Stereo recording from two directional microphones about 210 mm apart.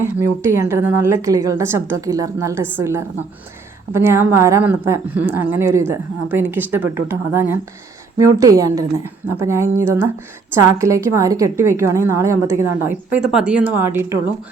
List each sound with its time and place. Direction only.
0.0 s a woman's voice: 10° right (ahead or behind)